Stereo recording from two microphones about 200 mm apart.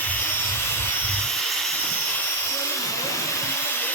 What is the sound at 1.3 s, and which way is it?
Vehicle, centre (ahead or behind).